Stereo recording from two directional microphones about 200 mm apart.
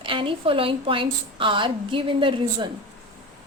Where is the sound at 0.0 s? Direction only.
25° right (ahead or behind).